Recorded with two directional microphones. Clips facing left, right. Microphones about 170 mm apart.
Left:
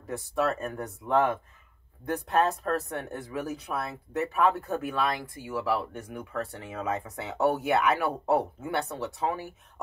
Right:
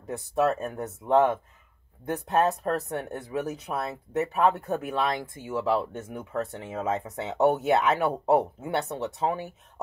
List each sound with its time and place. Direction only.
0.0 s speech: 20° right (ahead or behind)